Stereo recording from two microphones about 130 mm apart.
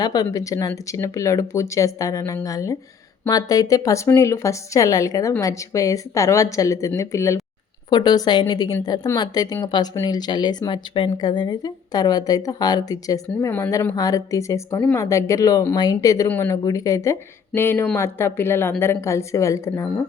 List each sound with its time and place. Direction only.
0.0 s a woman's voice: 30° left (ahead or behind)
7.9 s a woman's voice: 35° left (ahead or behind)